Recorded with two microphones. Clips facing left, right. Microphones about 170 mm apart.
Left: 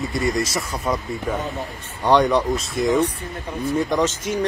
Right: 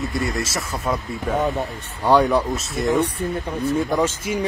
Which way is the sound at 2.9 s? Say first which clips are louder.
Even; 70° right (ahead or behind).